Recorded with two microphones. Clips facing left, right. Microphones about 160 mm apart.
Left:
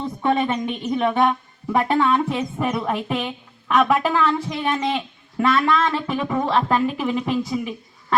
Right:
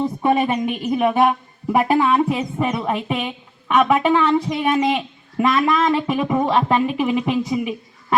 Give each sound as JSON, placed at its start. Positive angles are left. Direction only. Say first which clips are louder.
{"t": 0.0, "sound": "speech", "louder": "right 3 dB", "side_deg": -10}